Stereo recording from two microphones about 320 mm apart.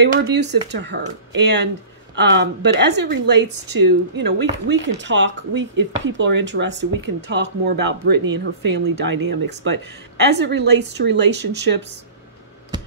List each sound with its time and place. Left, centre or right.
0.0 s speech: right